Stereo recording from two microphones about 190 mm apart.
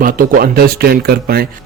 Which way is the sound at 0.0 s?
50° right (ahead or behind).